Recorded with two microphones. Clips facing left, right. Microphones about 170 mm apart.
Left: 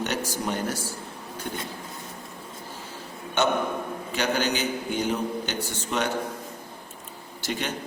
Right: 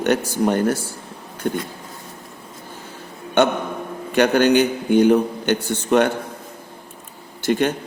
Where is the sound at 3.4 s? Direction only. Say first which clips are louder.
Right 6 dB; 55° right (ahead or behind).